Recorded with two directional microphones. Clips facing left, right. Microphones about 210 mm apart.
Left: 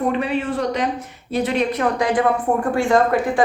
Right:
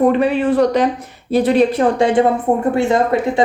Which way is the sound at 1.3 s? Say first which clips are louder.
Right 7 dB; 35° right (ahead or behind).